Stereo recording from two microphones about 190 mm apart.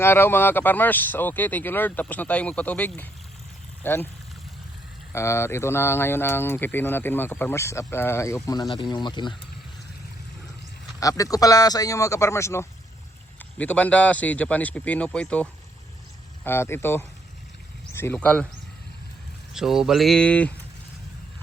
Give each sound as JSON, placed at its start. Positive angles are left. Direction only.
{"t": 0.0, "sound": "speech", "side_deg": 10}
{"t": 5.1, "sound": "speech", "side_deg": 15}
{"t": 11.2, "sound": "speech", "side_deg": 20}
{"t": 19.5, "sound": "a sound", "side_deg": 0}